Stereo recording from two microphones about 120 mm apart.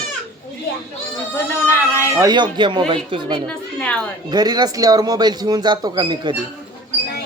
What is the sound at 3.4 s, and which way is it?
Music, 10° left (ahead or behind).